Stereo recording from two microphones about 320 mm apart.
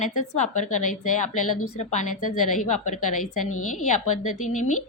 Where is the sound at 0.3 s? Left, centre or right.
Left.